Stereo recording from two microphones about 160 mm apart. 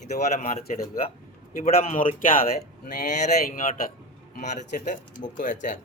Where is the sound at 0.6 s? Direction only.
65° left (ahead or behind).